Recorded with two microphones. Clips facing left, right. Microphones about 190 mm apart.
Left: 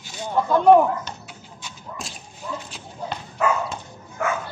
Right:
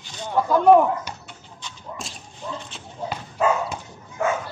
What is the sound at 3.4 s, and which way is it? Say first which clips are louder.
Bow-wow: right 1 dB; 20° right (ahead or behind).